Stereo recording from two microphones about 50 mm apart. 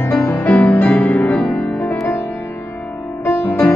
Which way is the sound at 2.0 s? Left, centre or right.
Left.